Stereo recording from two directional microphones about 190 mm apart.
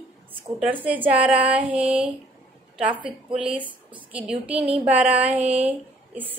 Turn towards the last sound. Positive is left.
turn(degrees=-10)  # may be behind; listen again after turning